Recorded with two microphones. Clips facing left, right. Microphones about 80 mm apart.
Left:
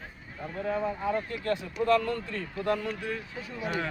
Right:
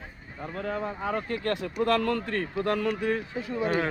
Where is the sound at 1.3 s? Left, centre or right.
Right.